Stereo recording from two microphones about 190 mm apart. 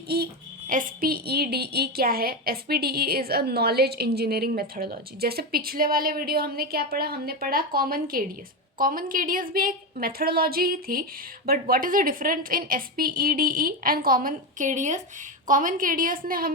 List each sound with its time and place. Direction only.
0.7 s a woman's voice: 45° right (ahead or behind)